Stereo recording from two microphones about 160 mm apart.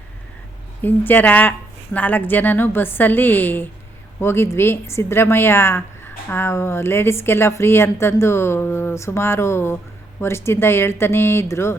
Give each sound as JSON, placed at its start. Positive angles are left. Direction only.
{"t": 0.8, "sound": "a woman's voice", "side_deg": 10}